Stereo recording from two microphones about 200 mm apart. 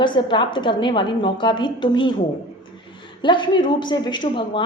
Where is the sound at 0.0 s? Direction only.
25° left (ahead or behind).